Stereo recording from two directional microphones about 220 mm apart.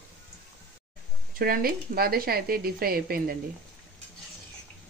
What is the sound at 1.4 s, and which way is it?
Speech, 40° right (ahead or behind).